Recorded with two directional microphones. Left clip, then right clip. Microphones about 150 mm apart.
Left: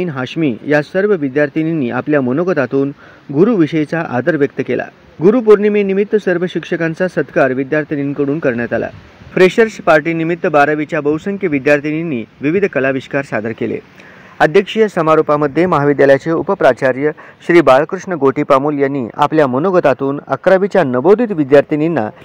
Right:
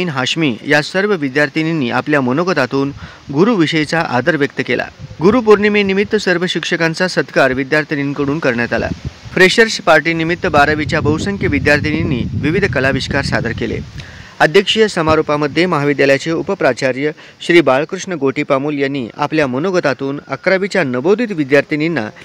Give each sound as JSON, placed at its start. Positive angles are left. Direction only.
{"t": 0.0, "sound": "speech", "side_deg": -20}
{"t": 6.8, "sound": "speech", "side_deg": -30}
{"t": 15.4, "sound": "speech", "side_deg": -5}
{"t": 15.8, "sound": "speech", "side_deg": -20}
{"t": 16.3, "sound": "speech", "side_deg": -10}
{"t": 16.5, "sound": "speech", "side_deg": -25}
{"t": 19.1, "sound": "speech", "side_deg": -5}
{"t": 20.2, "sound": "speech", "side_deg": -15}